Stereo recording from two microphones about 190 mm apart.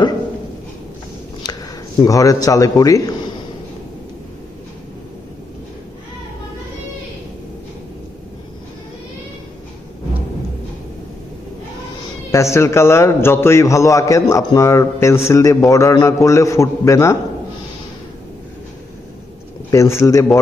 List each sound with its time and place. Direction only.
1.4 s speech: 20° left (ahead or behind)
12.3 s a man's voice: 15° left (ahead or behind)
19.7 s a man's voice: 15° left (ahead or behind)